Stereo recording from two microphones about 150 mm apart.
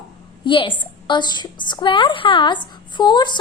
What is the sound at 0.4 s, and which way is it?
A woman's voice, 35° left (ahead or behind).